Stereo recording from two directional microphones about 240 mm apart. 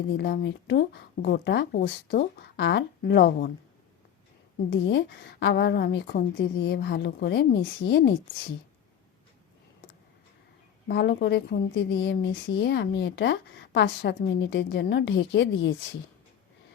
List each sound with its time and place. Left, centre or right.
0.2 s speech: left
4.7 s speech: left
10.8 s speech: left